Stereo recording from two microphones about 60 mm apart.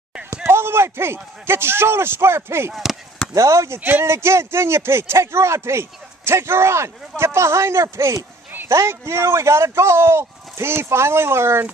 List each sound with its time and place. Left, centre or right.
0.3 s speech: right
2.7 s speech: centre
3.3 s speech: right
3.8 s speech: right